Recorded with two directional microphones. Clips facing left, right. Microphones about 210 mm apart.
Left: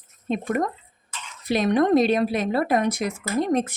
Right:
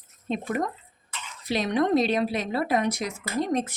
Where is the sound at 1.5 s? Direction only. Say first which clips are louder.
Left 4 dB; 50° left (ahead or behind).